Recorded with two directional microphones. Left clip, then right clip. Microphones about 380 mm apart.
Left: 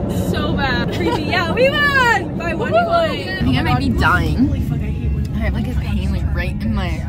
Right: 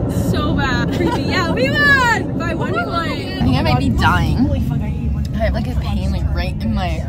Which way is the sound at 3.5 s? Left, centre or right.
Centre.